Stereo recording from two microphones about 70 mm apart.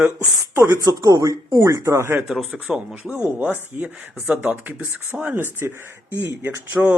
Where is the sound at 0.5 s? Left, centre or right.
Right.